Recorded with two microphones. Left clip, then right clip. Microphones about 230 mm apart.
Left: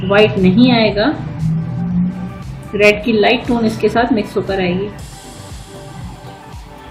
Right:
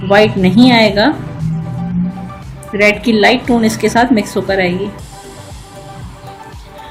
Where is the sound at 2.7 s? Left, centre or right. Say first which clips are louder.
Even; right.